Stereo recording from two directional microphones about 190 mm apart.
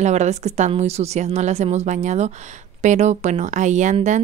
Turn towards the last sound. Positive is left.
turn(degrees=-40)  # may be behind; listen again after turning